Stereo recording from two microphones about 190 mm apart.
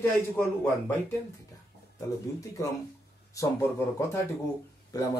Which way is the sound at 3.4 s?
15° left (ahead or behind).